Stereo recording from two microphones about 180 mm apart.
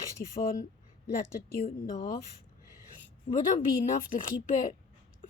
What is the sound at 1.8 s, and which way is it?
Speech, 50° left (ahead or behind).